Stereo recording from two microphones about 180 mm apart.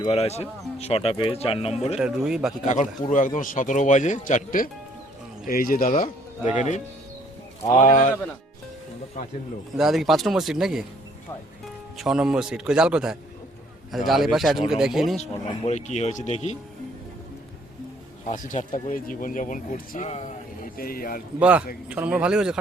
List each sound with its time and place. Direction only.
0.0 s speech: 35° left (ahead or behind)
2.0 s speech: 5° right (ahead or behind)
3.1 s speech: 45° left (ahead or behind)
9.2 s speech: 50° left (ahead or behind)
9.7 s speech: centre (ahead or behind)
11.9 s speech: 5° right (ahead or behind)
15.2 s speech: 35° left (ahead or behind)
18.3 s speech: 45° left (ahead or behind)
20.1 s a sound: 40° left (ahead or behind)
20.7 s speech: 55° left (ahead or behind)
21.3 s speech: 10° right (ahead or behind)